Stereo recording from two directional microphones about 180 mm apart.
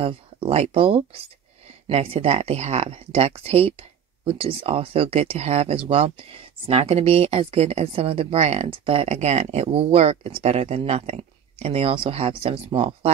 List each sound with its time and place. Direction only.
0.0 s a woman's voice: 30° right (ahead or behind)